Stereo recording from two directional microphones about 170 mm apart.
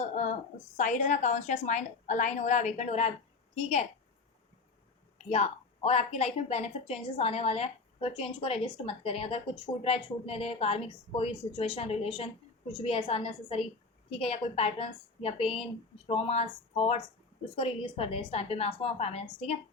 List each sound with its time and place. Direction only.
0.0 s a sound: 45° left (ahead or behind)
0.8 s a woman's voice: 45° left (ahead or behind)
5.1 s a woman's voice: 40° left (ahead or behind)